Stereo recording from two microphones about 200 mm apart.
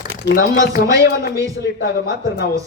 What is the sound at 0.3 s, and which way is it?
Speech, 50° left (ahead or behind).